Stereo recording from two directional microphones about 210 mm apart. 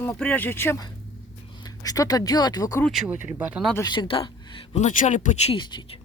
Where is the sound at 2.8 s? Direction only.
5° right (ahead or behind).